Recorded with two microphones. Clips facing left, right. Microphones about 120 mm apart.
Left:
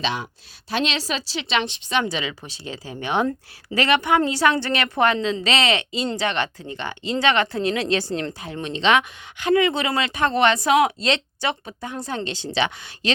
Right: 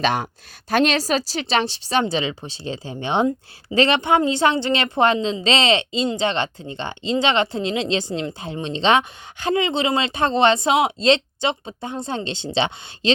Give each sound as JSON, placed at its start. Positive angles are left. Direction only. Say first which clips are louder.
{"t": 0.0, "sound": "a woman's voice", "louder": "right 5 dB", "side_deg": -50}